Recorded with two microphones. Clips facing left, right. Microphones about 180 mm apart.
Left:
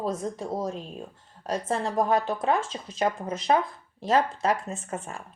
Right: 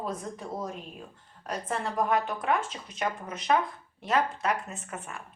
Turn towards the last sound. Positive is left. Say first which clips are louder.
# left 6 dB
turn(degrees=30)  # may be behind; listen again after turning